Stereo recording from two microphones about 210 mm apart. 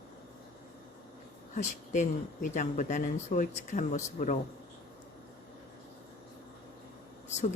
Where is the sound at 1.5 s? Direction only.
35° left (ahead or behind).